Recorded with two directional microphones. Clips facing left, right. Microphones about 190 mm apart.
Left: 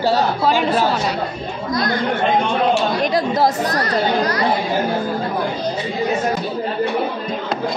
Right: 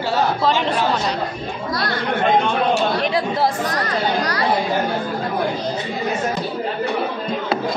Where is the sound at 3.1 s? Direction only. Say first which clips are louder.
Left 3 dB; 40° left (ahead or behind).